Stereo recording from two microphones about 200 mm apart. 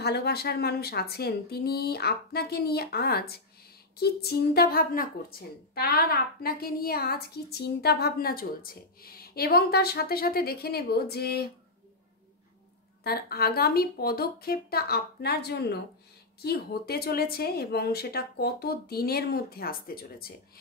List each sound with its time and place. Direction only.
0.0 s speech: 55° left (ahead or behind)
13.0 s speech: 50° left (ahead or behind)